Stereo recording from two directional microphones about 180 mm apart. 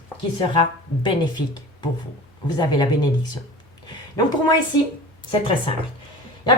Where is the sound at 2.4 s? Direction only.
25° left (ahead or behind).